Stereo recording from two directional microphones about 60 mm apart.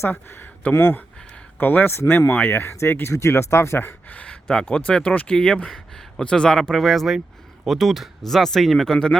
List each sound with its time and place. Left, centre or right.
0.1 s speech: left
4.1 s speech: left